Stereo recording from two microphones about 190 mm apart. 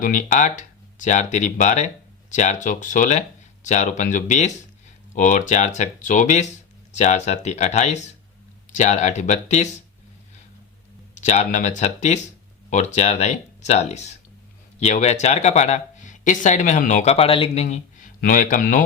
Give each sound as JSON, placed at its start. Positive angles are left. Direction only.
{"t": 0.0, "sound": "speech", "side_deg": 45}
{"t": 11.1, "sound": "speech", "side_deg": 40}